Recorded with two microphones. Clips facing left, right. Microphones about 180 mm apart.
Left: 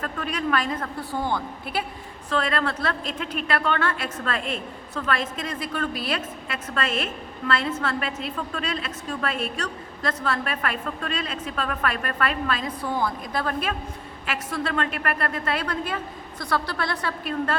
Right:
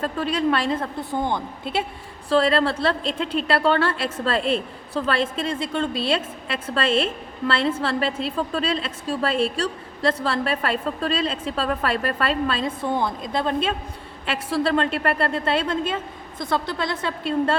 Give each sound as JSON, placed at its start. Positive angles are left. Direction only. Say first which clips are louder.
{"t": 0.0, "sound": "a woman's voice", "louder": "right 6 dB", "side_deg": -30}